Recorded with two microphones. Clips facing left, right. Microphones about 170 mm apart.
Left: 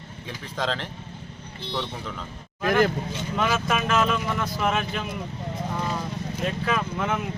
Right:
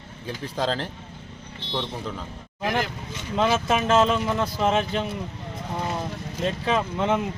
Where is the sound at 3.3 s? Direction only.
30° right (ahead or behind).